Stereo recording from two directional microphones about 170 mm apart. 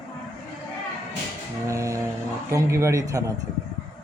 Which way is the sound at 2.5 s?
15° right (ahead or behind).